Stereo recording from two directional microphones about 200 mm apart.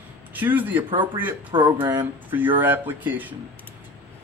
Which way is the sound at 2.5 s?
10° right (ahead or behind).